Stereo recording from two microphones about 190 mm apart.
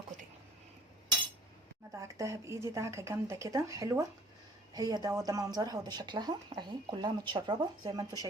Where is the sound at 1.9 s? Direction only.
15° right (ahead or behind).